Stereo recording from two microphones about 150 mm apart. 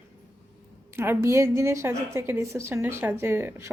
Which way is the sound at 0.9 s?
15° right (ahead or behind).